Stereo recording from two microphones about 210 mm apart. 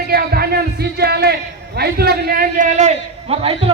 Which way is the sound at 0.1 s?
45° right (ahead or behind).